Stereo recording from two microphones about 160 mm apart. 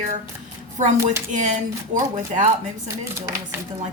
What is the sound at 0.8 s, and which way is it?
Speech, 50° right (ahead or behind).